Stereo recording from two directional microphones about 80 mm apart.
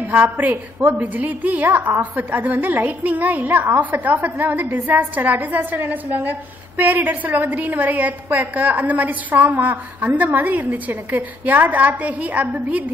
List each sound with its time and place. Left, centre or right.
0.1 s a woman's voice: right